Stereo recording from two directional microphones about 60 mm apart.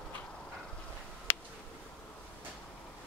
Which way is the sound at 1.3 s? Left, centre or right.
Left.